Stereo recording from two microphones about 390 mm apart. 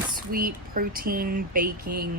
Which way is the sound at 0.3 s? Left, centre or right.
Right.